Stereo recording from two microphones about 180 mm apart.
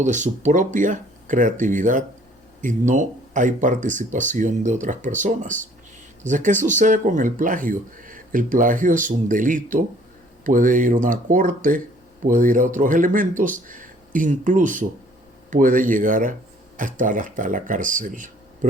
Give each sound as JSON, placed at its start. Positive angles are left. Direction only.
{"t": 0.0, "sound": "speech", "side_deg": -45}